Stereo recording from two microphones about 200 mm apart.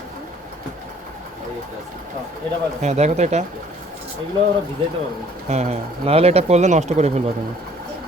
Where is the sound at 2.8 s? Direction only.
35° right (ahead or behind).